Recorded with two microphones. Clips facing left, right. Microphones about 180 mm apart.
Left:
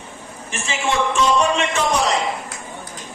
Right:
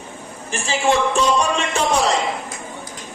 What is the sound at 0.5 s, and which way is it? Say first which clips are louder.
Speech: right 4 dB; 35° right (ahead or behind).